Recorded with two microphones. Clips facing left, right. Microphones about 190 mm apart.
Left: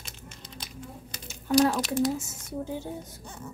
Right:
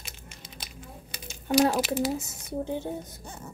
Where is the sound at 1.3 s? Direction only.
5° right (ahead or behind).